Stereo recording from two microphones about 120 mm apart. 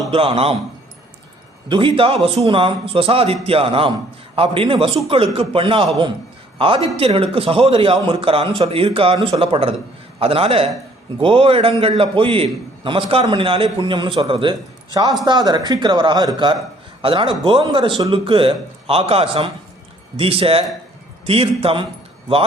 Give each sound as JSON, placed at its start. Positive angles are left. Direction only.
{"t": 0.1, "sound": "a man's voice", "side_deg": -50}
{"t": 1.6, "sound": "a man's voice", "side_deg": -45}
{"t": 6.9, "sound": "a man's voice", "side_deg": -50}
{"t": 15.2, "sound": "a man's voice", "side_deg": -35}